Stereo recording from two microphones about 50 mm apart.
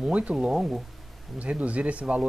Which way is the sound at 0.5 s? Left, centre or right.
Centre.